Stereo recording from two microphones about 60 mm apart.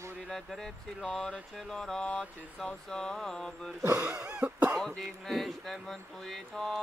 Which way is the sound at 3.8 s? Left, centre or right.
Right.